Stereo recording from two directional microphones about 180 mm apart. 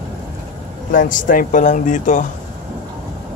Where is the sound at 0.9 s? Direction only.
50° left (ahead or behind).